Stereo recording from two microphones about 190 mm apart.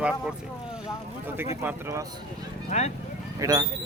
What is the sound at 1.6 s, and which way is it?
Speech, 15° right (ahead or behind).